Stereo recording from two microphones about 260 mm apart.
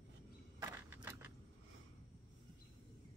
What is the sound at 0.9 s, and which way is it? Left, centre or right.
Keys jangling, centre.